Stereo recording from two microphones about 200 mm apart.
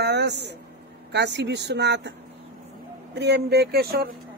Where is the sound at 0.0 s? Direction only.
60° right (ahead or behind).